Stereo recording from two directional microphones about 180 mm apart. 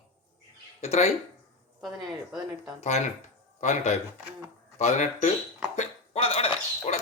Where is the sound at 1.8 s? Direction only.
Centre (ahead or behind).